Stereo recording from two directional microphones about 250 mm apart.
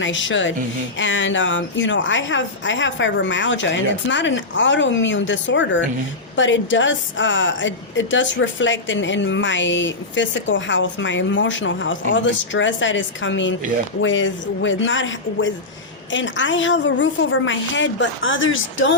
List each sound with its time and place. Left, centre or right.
0.0 s a woman's voice: left